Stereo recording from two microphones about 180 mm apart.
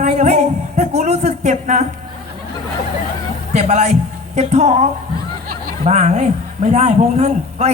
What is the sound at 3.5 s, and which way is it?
Music, 40° right (ahead or behind).